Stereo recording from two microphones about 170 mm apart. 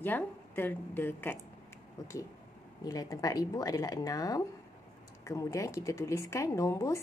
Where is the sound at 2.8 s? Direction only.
20° left (ahead or behind).